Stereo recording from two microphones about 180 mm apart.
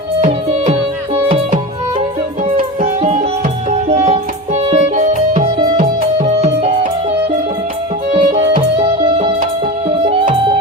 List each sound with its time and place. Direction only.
0.2 s music: 40° right (ahead or behind)
2.8 s music: 40° right (ahead or behind)
8.1 s music: 30° right (ahead or behind)